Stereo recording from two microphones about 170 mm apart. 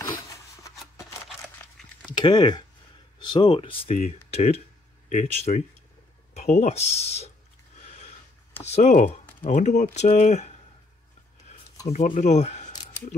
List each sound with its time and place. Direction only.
2.0 s speech: 25° left (ahead or behind)
7.8 s a sound: 40° left (ahead or behind)
8.6 s speech: 45° left (ahead or behind)
11.9 s speech: 45° left (ahead or behind)